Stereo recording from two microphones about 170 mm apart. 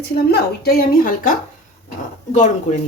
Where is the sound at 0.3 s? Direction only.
65° left (ahead or behind).